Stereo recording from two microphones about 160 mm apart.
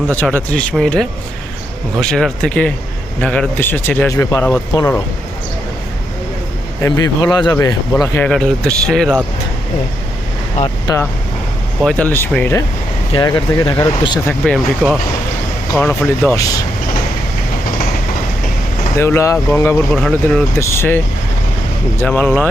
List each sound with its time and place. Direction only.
0.2 s speech: 10° left (ahead or behind)
6.8 s speech: 20° left (ahead or behind)
8.3 s speech: 5° left (ahead or behind)
10.6 s speech: 45° left (ahead or behind)
11.8 s speech: 5° left (ahead or behind)
13.1 s speech: 30° left (ahead or behind)
14.3 s speech: centre (ahead or behind)
18.9 s speech: 15° left (ahead or behind)
19.9 s speech: 5° left (ahead or behind)